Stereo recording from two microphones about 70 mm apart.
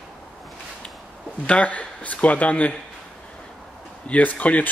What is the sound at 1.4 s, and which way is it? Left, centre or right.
Speech, centre.